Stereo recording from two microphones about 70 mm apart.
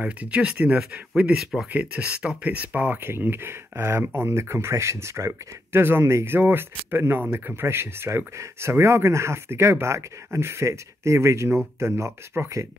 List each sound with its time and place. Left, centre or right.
0.0 s speech: centre
1.3 s speech: centre
1.7 s speech: right